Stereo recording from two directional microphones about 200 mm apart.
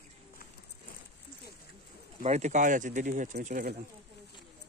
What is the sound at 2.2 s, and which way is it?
Speech, 35° right (ahead or behind).